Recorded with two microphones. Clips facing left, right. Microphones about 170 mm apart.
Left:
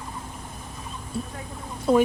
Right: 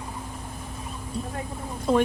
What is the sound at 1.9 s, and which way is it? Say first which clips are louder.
Speech: left 2 dB; 5° left (ahead or behind).